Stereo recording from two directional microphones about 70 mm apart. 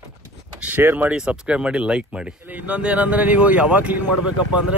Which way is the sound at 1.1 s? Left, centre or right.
Centre.